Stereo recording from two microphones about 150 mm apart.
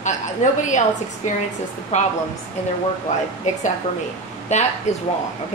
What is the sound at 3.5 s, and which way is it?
A woman's voice, 55° left (ahead or behind).